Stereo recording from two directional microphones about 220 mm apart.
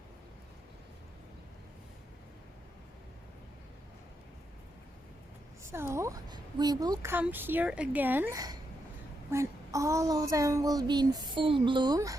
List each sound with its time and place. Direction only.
5.6 s speech: 10° right (ahead or behind)